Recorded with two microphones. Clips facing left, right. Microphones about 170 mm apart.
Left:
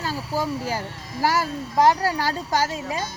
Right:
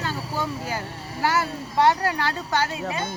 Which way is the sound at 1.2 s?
35° left (ahead or behind).